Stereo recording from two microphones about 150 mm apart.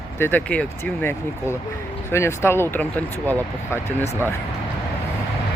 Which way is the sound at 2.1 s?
15° left (ahead or behind).